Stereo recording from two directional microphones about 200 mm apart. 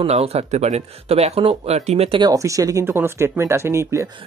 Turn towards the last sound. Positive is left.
turn(degrees=-15)  # may be behind; listen again after turning